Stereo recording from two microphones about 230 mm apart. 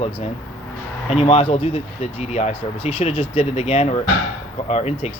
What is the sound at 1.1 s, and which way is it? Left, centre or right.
Speech, left.